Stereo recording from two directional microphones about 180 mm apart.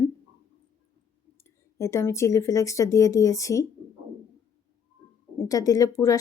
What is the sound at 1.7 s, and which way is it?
Speech, 15° left (ahead or behind).